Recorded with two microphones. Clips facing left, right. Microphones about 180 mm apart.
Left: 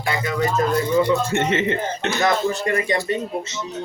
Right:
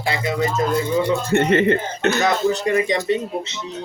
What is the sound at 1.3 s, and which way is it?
Speech, 40° right (ahead or behind).